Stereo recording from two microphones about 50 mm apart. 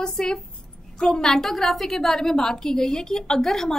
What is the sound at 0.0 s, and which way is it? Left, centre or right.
A woman's voice, centre.